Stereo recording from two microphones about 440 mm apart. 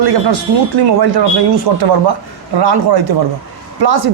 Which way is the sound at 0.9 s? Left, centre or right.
Right.